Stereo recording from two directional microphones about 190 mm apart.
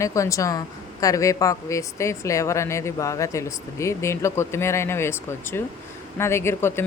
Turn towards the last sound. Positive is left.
turn(degrees=15)  # may be behind; listen again after turning